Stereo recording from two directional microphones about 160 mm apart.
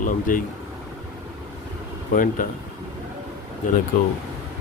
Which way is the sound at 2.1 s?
55° left (ahead or behind).